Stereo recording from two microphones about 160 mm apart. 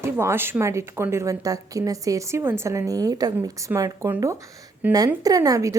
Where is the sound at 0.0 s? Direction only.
15° right (ahead or behind).